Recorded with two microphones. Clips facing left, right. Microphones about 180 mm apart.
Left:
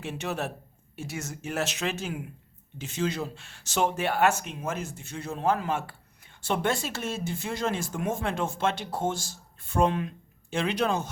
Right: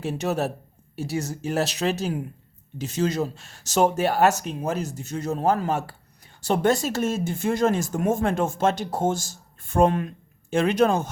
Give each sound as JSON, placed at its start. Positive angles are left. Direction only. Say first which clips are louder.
{"t": 0.0, "sound": "speech", "louder": "right 7 dB", "side_deg": -40}